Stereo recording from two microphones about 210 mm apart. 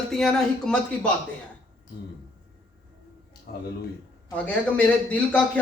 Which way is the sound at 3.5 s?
50° left (ahead or behind).